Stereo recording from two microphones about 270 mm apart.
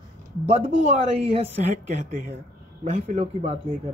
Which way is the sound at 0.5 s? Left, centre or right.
Right.